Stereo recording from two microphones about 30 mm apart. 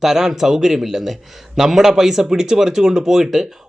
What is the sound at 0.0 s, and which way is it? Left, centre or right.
Speech, centre.